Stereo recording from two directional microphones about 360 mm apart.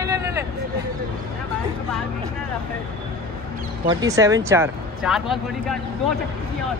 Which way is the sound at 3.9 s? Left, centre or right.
Centre.